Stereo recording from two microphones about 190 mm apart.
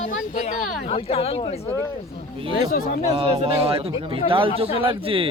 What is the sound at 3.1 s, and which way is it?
Speech, 30° right (ahead or behind).